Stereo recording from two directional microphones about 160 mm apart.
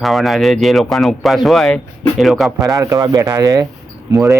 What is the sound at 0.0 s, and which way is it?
Speech, centre (ahead or behind).